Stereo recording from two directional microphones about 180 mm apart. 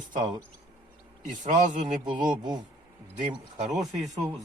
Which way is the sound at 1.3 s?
45° right (ahead or behind).